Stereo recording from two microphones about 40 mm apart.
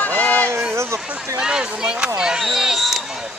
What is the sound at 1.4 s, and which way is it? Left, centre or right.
Speech, centre.